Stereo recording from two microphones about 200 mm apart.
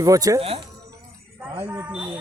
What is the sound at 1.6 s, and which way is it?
Livestock, 5° right (ahead or behind).